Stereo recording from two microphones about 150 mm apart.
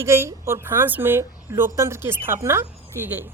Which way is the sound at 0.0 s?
15° right (ahead or behind).